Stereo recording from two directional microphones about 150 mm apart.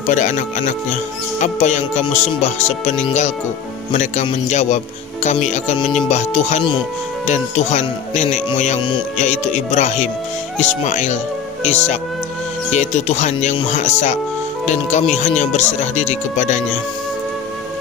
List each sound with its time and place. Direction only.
0.0 s speech: 55° left (ahead or behind)